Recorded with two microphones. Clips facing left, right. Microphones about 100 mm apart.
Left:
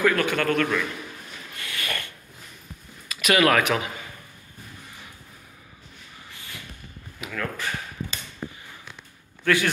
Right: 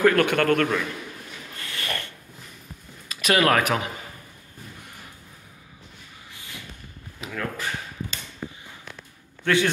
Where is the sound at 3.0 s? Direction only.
35° right (ahead or behind).